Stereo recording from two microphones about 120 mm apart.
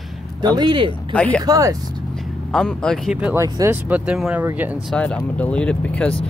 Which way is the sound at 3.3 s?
25° right (ahead or behind).